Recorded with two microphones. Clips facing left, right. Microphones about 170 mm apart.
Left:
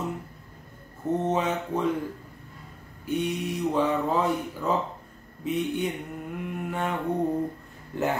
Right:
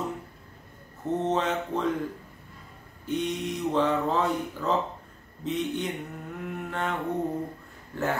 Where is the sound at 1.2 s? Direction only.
10° left (ahead or behind).